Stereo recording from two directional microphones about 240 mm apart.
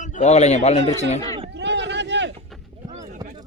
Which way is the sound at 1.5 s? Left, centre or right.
Right.